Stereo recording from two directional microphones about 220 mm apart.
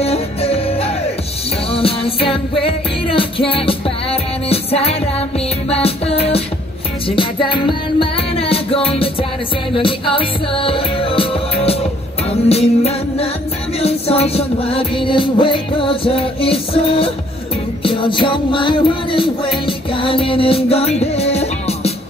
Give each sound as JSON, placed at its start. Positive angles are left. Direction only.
{"t": 0.0, "sound": "music", "side_deg": 30}